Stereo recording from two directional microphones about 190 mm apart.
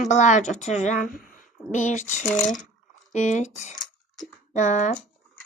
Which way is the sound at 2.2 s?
5° left (ahead or behind).